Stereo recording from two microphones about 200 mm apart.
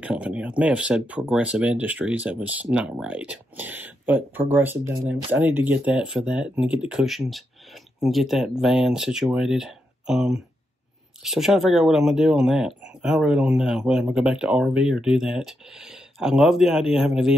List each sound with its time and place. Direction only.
0.0 s speech: 5° right (ahead or behind)